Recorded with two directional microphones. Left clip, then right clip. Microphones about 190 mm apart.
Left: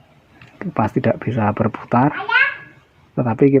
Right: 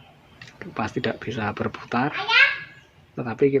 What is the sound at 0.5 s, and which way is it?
Speech, 60° left (ahead or behind).